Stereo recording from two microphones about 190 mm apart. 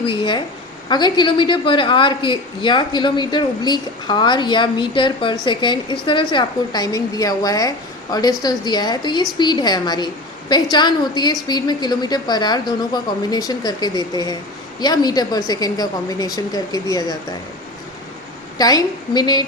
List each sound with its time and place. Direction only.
0.0 s a woman's voice: 25° left (ahead or behind)
18.5 s a woman's voice: 20° left (ahead or behind)